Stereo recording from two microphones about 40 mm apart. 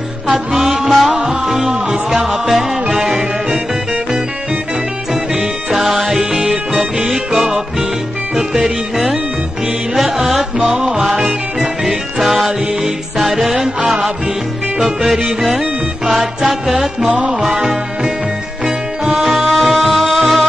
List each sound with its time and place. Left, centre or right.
0.5 s music: centre
5.3 s music: centre
13.7 s music: right
14.8 s music: centre
17.1 s music: right
19.1 s music: centre